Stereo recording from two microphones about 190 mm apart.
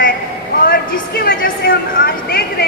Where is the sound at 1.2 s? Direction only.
50° left (ahead or behind).